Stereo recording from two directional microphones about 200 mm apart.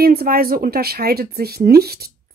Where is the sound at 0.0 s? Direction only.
50° right (ahead or behind).